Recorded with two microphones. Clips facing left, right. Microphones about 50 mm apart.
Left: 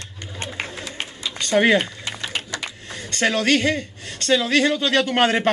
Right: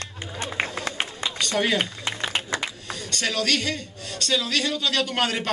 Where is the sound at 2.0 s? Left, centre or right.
Right.